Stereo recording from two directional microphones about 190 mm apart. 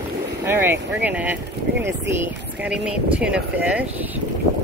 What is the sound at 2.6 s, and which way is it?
Speech, 5° right (ahead or behind).